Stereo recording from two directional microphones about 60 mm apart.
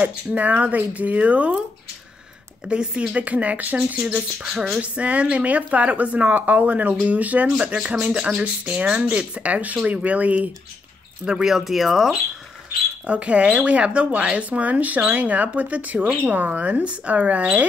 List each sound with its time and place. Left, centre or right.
0.0 s a woman's voice: right
2.7 s a woman's voice: centre
4.5 s a woman's voice: centre
11.2 s speech: centre
13.0 s a woman's voice: right